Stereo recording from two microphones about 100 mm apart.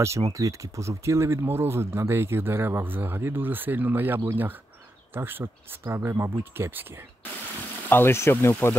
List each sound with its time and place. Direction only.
0.3 s speech: 30° right (ahead or behind)
7.9 s speech: 25° left (ahead or behind)